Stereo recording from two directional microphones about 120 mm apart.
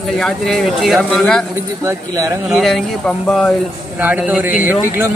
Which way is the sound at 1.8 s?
25° right (ahead or behind).